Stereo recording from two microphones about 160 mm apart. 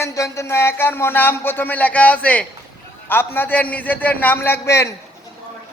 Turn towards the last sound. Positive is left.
turn(degrees=15)  # may be behind; listen again after turning